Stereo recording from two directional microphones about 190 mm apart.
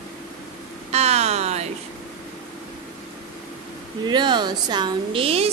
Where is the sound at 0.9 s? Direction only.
35° right (ahead or behind).